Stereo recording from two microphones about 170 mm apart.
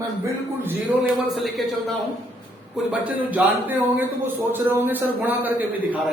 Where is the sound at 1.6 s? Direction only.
Centre (ahead or behind).